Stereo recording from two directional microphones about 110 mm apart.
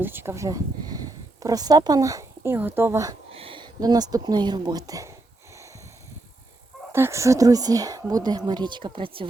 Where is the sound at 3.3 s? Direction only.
55° right (ahead or behind).